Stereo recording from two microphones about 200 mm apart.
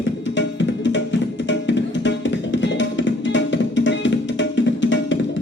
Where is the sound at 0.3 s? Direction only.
65° left (ahead or behind).